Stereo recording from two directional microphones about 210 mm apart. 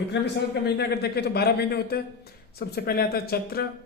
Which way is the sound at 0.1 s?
55° left (ahead or behind).